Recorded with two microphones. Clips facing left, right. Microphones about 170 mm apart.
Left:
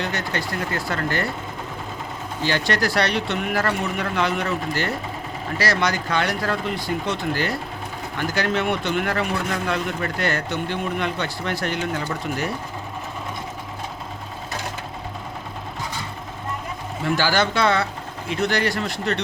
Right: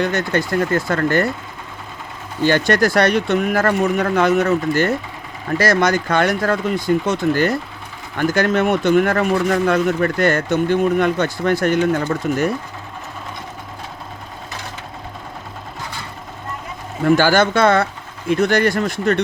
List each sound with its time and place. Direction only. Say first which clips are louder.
0.0 s speech: right 7 dB; 50° right (ahead or behind)
2.4 s speech: right 7 dB; 50° right (ahead or behind)
17.0 s speech: right 7 dB; 50° right (ahead or behind)